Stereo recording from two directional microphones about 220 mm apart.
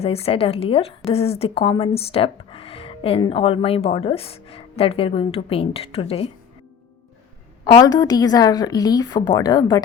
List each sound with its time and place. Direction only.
0.0 s a woman's voice: 25° left (ahead or behind)
7.6 s a woman's voice: 15° left (ahead or behind)